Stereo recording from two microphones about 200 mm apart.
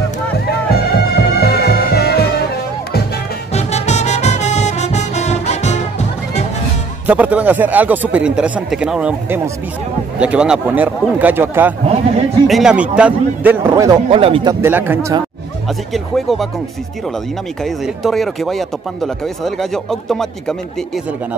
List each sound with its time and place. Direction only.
0.5 s music: 50° left (ahead or behind)
3.5 s music: 35° left (ahead or behind)
7.1 s speech: 5° right (ahead or behind)
14.1 s a man's voice: 25° right (ahead or behind)
14.5 s speech: 10° right (ahead or behind)
15.9 s speech: centre (ahead or behind)
17.6 s speech: centre (ahead or behind)